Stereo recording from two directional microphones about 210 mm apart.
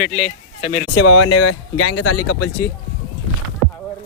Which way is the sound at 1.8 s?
90° left.